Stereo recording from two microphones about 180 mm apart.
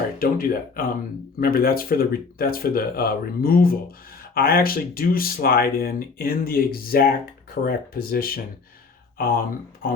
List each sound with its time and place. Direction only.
0.2 s speech: 50° left (ahead or behind)